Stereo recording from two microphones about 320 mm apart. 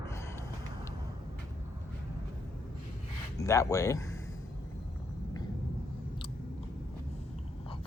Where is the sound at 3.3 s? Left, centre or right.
Centre.